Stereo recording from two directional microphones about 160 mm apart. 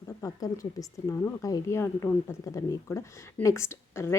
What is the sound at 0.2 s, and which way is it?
Speech, 20° left (ahead or behind).